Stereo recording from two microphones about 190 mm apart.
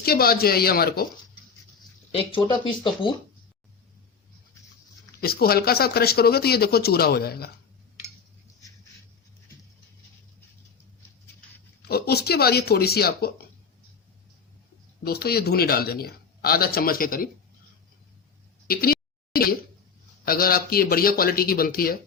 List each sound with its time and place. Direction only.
0.0 s a man's voice: 50° left (ahead or behind)
2.1 s speech: 25° left (ahead or behind)
5.2 s speech: 55° left (ahead or behind)
11.8 s speech: 55° left (ahead or behind)
15.0 s a man's voice: 55° left (ahead or behind)
18.7 s a man's voice: 50° left (ahead or behind)
20.2 s a man's voice: 50° left (ahead or behind)